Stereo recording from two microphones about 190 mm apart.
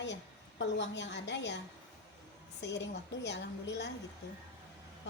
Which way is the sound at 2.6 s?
65° left (ahead or behind).